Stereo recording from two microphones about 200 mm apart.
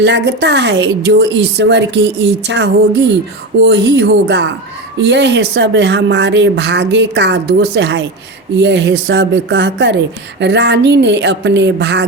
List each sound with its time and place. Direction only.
0.0 s a woman's voice: 60° right (ahead or behind)